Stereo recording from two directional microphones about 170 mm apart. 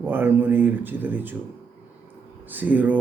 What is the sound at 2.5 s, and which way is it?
Mantra, 10° right (ahead or behind).